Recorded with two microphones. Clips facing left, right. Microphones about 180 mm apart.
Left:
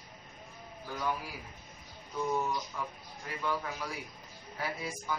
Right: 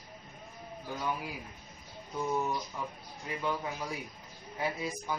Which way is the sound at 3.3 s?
20° right (ahead or behind).